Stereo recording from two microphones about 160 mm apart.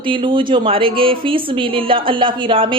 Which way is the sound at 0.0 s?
30° right (ahead or behind).